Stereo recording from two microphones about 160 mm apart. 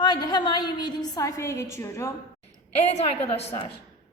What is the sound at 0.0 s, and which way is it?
A woman's voice, 25° left (ahead or behind).